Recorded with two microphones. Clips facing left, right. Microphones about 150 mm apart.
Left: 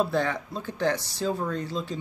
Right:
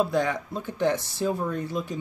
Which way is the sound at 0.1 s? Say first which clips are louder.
Right 1 dB; 15° right (ahead or behind).